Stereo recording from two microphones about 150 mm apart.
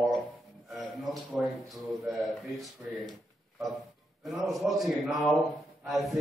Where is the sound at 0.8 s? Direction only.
Centre (ahead or behind).